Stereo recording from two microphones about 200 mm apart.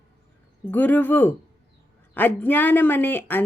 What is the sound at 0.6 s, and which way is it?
Speech, 10° left (ahead or behind).